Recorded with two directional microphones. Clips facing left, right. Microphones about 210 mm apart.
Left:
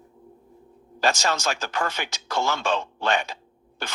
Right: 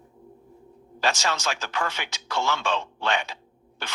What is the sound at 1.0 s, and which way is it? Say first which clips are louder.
Speech: left 3 dB; 45° left (ahead or behind).